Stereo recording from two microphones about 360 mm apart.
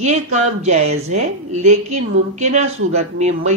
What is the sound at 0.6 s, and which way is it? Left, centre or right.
Speech, centre.